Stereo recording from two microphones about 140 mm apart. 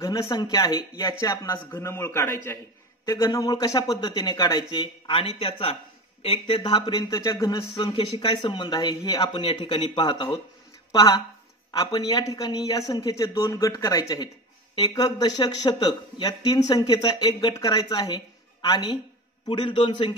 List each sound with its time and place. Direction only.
0.0 s speech: 25° left (ahead or behind)
7.9 s speech: 40° left (ahead or behind)